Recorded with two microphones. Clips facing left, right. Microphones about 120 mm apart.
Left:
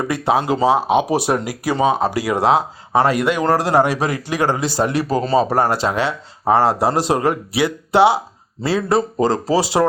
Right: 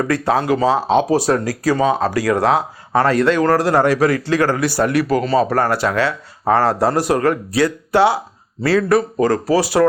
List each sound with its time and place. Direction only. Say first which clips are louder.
0.0 s speech: right 1 dB; 15° left (ahead or behind)